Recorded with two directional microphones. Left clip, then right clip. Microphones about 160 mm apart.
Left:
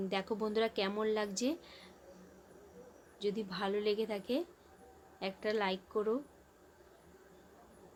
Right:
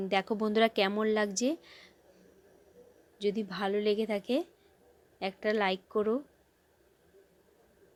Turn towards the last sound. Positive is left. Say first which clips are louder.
# right 5 dB
turn(degrees=-40)  # may be behind; listen again after turning